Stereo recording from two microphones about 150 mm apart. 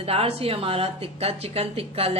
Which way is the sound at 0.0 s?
40° right (ahead or behind).